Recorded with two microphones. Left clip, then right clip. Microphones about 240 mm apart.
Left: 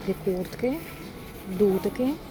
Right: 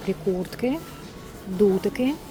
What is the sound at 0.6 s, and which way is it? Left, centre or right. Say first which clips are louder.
Speech: right 1 dB; right.